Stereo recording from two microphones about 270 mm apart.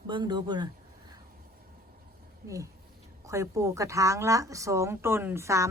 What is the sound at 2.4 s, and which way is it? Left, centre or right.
Speech, centre.